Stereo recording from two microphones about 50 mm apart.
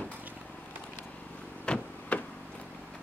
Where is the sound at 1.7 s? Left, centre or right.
Centre.